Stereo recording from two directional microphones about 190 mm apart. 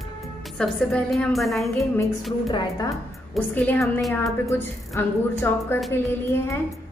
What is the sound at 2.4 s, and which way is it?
Speech, 20° left (ahead or behind).